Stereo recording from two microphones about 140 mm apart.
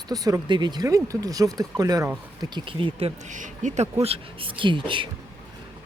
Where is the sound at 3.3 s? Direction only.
60° right (ahead or behind); by 5.1 s 35° right (ahead or behind).